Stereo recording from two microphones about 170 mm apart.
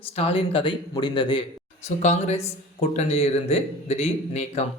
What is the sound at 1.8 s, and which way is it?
Speech, 40° left (ahead or behind).